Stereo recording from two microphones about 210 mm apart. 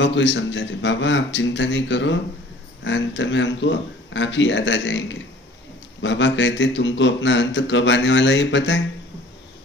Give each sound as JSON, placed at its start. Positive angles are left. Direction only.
{"t": 0.0, "sound": "a man's voice", "side_deg": 60}